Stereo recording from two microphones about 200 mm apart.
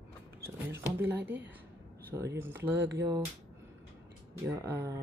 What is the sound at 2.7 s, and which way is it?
Speech, 60° right (ahead or behind).